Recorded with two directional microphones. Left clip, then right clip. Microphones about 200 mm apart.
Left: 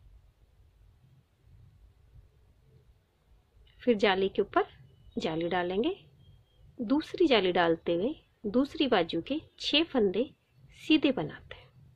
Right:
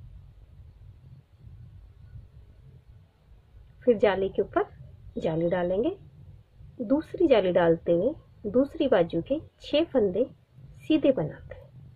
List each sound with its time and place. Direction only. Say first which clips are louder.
3.8 s a woman's voice: right 3 dB; 40° left (ahead or behind)